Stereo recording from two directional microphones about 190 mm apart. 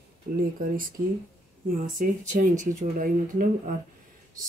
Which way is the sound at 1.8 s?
45° right (ahead or behind).